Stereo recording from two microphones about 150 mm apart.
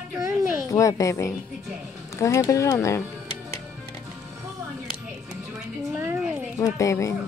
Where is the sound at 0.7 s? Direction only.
20° left (ahead or behind).